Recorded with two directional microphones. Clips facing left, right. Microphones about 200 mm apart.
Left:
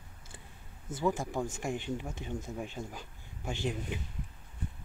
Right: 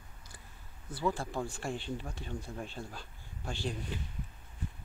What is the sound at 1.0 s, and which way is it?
Speech, 20° left (ahead or behind).